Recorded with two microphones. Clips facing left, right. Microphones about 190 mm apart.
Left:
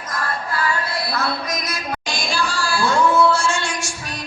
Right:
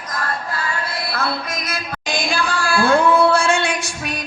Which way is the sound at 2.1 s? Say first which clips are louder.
Right 4 dB; 55° right (ahead or behind).